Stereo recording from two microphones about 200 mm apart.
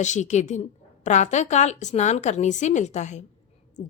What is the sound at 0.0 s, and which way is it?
A woman's voice, 35° left (ahead or behind).